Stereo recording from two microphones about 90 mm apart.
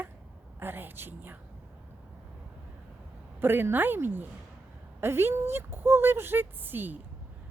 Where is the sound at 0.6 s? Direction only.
25° right (ahead or behind).